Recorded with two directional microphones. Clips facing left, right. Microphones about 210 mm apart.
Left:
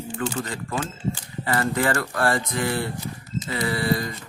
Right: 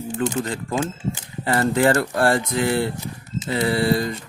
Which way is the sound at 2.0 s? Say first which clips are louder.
Right 4 dB; 30° right (ahead or behind).